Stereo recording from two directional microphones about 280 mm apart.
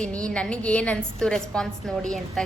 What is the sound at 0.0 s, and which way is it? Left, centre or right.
A woman's voice, centre.